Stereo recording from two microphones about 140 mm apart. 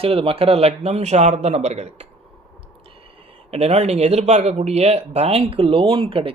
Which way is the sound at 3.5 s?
50° right (ahead or behind).